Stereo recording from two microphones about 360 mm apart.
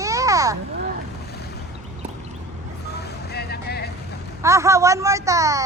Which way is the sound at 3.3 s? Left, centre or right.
Left.